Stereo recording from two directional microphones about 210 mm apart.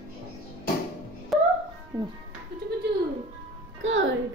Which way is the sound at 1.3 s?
Centre (ahead or behind).